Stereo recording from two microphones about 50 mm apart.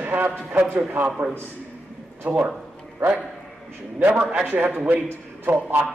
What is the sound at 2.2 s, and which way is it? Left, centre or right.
Speech, right.